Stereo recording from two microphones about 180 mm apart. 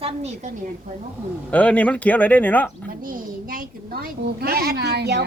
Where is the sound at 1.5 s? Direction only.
10° left (ahead or behind).